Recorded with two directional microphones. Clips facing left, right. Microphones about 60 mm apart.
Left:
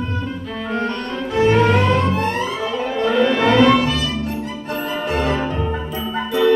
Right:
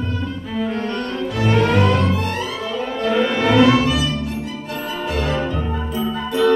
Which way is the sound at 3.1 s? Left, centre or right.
Centre.